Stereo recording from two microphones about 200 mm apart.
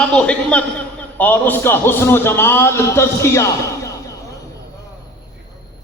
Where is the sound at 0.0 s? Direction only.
5° left (ahead or behind).